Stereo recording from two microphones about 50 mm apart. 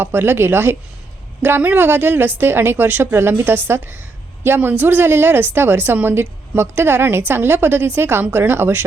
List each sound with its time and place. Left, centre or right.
0.0 s speech: right
1.4 s speech: right